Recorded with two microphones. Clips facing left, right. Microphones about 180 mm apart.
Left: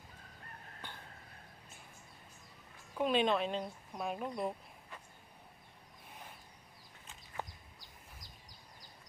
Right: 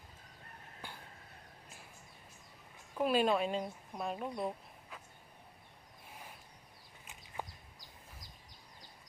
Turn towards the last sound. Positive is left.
turn(degrees=-15)  # may be behind; listen again after turning